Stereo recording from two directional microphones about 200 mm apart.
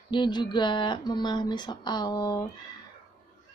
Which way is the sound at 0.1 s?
20° left (ahead or behind).